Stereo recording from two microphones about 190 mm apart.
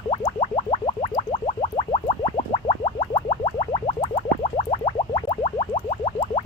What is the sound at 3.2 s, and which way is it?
Music, 30° left (ahead or behind).